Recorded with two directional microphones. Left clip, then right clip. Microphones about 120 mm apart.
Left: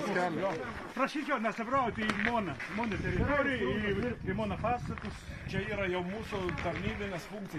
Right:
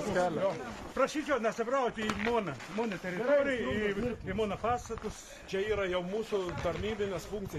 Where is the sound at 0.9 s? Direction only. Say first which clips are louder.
Right 2 dB; 55° right (ahead or behind).